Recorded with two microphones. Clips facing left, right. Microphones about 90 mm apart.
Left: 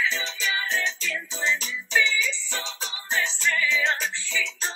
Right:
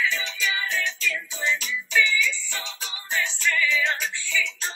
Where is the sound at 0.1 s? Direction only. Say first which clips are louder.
Right 1 dB; 30° left (ahead or behind).